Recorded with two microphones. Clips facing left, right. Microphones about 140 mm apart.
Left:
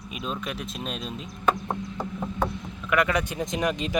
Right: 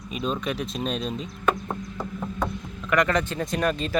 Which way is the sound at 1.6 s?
20° left (ahead or behind).